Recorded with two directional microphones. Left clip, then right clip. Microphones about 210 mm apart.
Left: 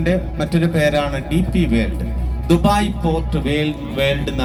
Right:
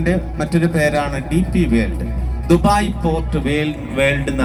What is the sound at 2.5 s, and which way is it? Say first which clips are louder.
Speech: right 2 dB; 40° left (ahead or behind).